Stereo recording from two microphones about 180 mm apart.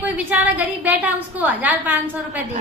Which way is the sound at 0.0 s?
10° right (ahead or behind).